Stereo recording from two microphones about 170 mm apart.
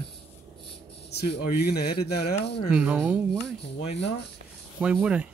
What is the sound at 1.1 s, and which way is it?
Speech, 75° left (ahead or behind).